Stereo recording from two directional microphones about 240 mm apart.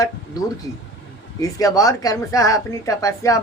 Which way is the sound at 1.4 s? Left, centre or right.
Centre.